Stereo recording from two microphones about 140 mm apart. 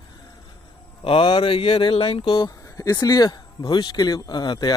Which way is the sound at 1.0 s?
40° left (ahead or behind).